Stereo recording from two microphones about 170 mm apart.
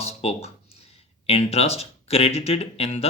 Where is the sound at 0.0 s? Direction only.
35° left (ahead or behind).